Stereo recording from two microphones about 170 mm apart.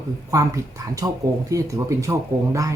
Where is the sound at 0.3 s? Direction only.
20° right (ahead or behind).